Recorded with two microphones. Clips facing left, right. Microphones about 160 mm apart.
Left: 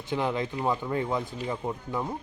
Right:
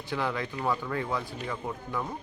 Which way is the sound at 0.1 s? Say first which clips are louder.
Left 3 dB; 20° left (ahead or behind).